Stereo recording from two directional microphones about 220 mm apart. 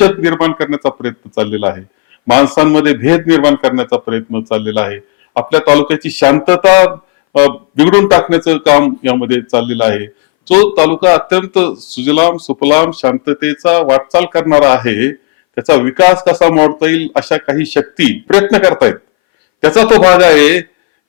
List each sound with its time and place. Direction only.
0.0 s speech: 10° left (ahead or behind)
12.3 s speech: 20° left (ahead or behind)
12.6 s speech: 10° left (ahead or behind)